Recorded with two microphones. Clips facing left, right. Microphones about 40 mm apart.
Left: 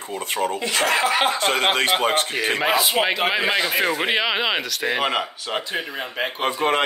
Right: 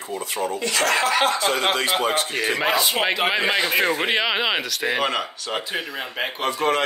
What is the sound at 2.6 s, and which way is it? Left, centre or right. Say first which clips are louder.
Speech: left 2 dB; centre.